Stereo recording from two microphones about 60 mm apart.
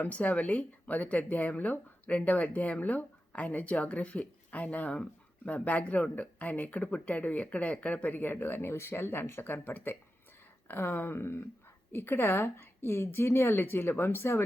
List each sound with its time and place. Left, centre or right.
0.0 s speech: left